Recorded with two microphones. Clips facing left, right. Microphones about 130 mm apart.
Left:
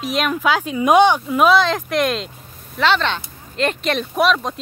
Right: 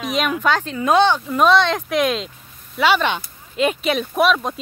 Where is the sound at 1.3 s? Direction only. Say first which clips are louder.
Left 1 dB; 5° left (ahead or behind).